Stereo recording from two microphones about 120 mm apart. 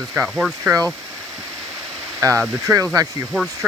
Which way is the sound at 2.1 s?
25° right (ahead or behind).